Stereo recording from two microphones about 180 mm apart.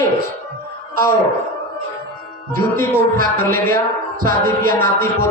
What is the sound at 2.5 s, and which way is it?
Speech, 50° right (ahead or behind).